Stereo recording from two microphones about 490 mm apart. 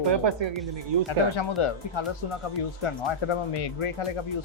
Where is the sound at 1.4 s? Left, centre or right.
Left.